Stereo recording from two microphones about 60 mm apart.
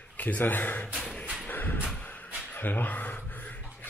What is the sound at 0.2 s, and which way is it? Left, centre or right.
Speech, left.